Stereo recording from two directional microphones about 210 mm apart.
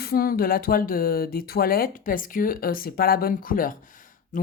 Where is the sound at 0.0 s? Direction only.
45° left (ahead or behind).